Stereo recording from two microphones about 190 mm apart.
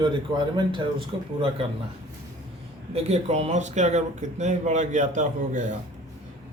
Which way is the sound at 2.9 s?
35° right (ahead or behind).